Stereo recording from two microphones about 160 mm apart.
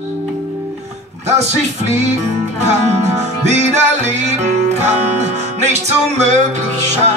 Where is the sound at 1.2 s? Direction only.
45° right (ahead or behind).